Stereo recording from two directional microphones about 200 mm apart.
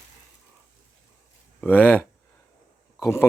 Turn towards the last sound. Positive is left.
turn(degrees=15)  # may be behind; listen again after turning